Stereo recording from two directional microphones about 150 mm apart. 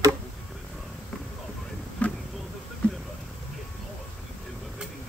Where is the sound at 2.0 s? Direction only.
10° left (ahead or behind).